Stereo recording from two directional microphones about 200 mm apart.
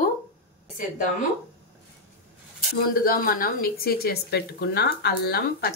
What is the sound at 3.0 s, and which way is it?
A woman's voice, 45° left (ahead or behind).